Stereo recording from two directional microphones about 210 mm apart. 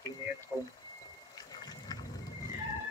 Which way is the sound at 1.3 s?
20° left (ahead or behind).